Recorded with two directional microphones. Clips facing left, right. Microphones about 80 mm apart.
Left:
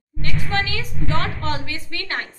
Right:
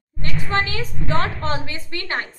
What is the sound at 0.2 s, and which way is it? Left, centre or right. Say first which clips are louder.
A woman's voice: right 1 dB; right.